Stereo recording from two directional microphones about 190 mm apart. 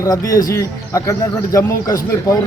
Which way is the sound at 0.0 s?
20° left (ahead or behind).